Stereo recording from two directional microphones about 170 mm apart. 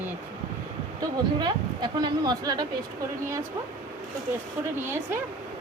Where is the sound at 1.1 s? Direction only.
25° right (ahead or behind).